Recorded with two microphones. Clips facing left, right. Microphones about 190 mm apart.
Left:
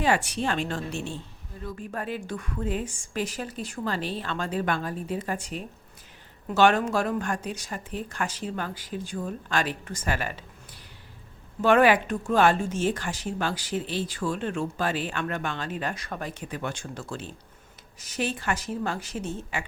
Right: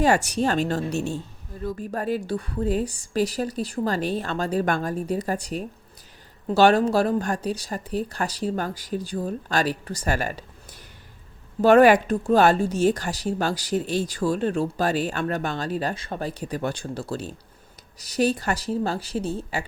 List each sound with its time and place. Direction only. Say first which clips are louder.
0.0 s speech: right 5 dB; 40° right (ahead or behind)